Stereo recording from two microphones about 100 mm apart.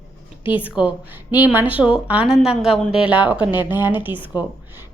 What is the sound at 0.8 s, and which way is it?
Speech, 50° left (ahead or behind).